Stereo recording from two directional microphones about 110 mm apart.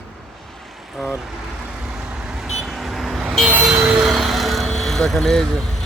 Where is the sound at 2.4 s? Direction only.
Centre (ahead or behind).